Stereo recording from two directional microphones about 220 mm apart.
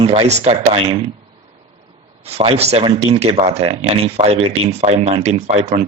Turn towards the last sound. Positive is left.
turn(degrees=-30)  # may be behind; listen again after turning